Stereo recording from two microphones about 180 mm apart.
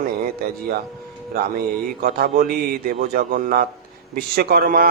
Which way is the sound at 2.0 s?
55° right (ahead or behind).